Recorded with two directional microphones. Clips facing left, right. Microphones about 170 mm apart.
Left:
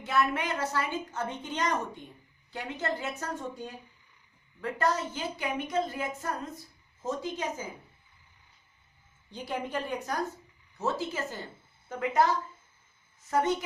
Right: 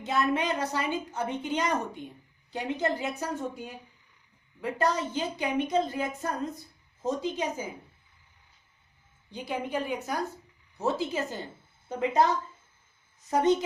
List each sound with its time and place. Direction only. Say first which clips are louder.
0.0 s a woman's voice: right 2 dB; 20° right (ahead or behind)
9.3 s a woman's voice: right 2 dB; centre (ahead or behind); by 12.2 s 20° right (ahead or behind)
13.3 s a woman's voice: right 4 dB; 20° right (ahead or behind)